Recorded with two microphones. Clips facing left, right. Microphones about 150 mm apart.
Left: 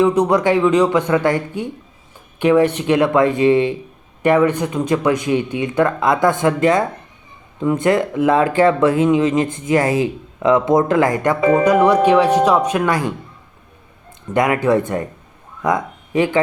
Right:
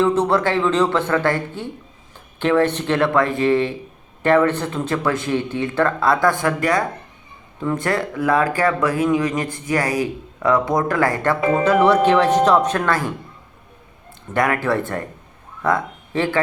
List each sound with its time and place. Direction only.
0.0 s speech: 15° left (ahead or behind)
11.3 s music: centre (ahead or behind)
12.0 s speech: 10° left (ahead or behind)
14.3 s speech: 20° left (ahead or behind)